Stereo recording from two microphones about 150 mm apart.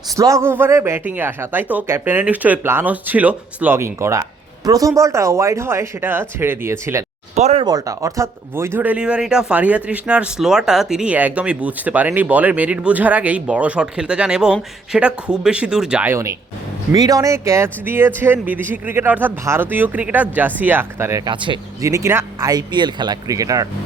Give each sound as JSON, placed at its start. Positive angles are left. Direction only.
{"t": 0.2, "sound": "speech", "side_deg": -20}
{"t": 7.3, "sound": "speech", "side_deg": -50}
{"t": 7.6, "sound": "speech", "side_deg": -25}
{"t": 16.9, "sound": "speech", "side_deg": -25}
{"t": 21.2, "sound": "speech", "side_deg": -30}
{"t": 21.8, "sound": "speech", "side_deg": -20}